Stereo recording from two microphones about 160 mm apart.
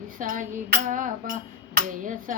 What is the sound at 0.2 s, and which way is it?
Music, 55° right (ahead or behind).